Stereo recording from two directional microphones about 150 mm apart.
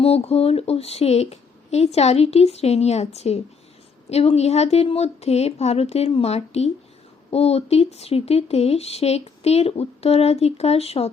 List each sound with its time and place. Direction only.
0.0 s speech: 45° left (ahead or behind)